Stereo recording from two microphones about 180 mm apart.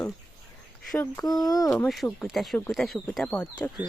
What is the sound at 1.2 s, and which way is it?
Speech, 20° left (ahead or behind).